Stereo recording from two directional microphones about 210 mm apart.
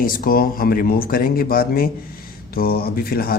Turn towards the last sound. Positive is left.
turn(degrees=45)  # may be behind; listen again after turning